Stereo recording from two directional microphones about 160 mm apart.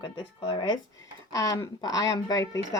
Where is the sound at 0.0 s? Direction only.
30° left (ahead or behind).